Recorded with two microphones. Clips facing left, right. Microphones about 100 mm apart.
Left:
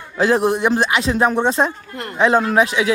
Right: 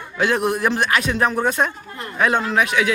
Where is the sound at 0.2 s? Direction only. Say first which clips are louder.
Left 3 dB; 30° left (ahead or behind).